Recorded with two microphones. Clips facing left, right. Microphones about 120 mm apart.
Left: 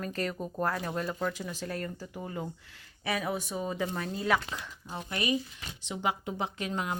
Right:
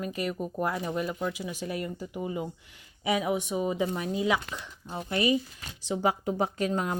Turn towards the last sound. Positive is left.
turn(degrees=-40)  # may be behind; listen again after turning